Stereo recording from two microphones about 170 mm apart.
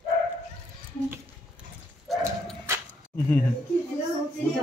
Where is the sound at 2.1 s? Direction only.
Centre (ahead or behind).